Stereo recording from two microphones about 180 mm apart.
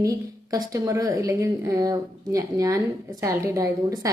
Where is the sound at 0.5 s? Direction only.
20° right (ahead or behind).